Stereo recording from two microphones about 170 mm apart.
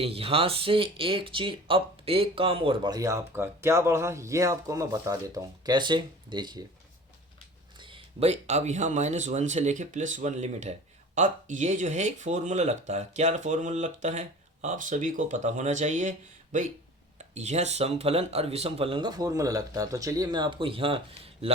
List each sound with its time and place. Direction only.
0.0 s speech: 35° right (ahead or behind)
7.8 s speech: 30° right (ahead or behind)